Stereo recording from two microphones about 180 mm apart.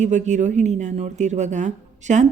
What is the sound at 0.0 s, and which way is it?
Speech, 40° right (ahead or behind).